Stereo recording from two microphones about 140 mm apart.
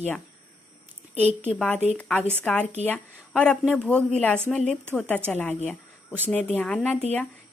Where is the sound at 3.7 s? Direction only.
10° left (ahead or behind).